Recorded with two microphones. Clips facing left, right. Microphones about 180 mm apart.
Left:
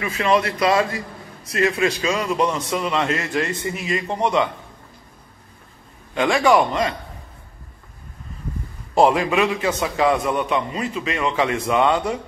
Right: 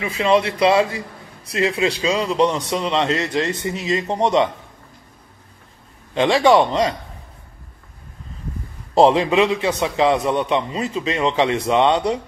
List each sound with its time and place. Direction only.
0.1 s a man's voice: 30° right (ahead or behind)
2.0 s a man's voice: 30° right (ahead or behind)
6.1 s a man's voice: 20° right (ahead or behind)
8.9 s a man's voice: 25° right (ahead or behind)